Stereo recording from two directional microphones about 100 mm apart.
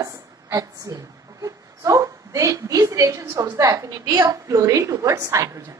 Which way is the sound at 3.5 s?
30° right (ahead or behind).